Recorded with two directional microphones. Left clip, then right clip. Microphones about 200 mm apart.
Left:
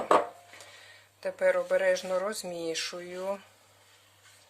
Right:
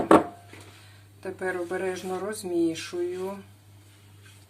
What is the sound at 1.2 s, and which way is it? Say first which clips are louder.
Speech: left 5 dB; 50° left (ahead or behind).